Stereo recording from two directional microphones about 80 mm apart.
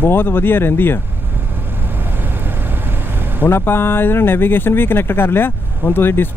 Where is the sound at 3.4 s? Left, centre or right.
Left.